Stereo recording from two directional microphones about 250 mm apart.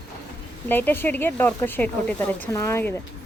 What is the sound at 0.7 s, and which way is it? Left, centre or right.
Speech, centre.